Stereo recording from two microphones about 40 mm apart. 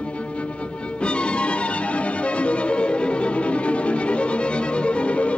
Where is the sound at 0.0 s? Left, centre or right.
Left.